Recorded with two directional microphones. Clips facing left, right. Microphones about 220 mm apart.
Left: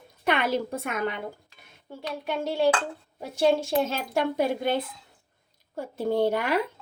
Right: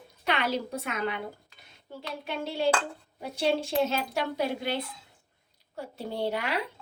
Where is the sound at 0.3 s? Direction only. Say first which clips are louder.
Left 4 dB; 50° left (ahead or behind).